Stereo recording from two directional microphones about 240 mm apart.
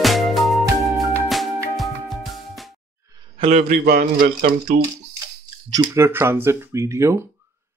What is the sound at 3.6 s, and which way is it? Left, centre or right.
Speech, right.